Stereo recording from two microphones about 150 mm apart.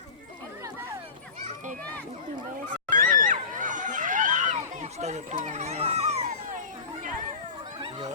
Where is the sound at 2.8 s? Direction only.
65° right (ahead or behind).